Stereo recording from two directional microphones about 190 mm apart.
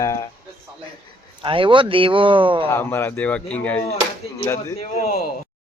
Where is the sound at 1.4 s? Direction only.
25° right (ahead or behind).